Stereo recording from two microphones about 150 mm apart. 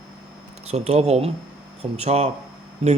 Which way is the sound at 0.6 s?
45° right (ahead or behind).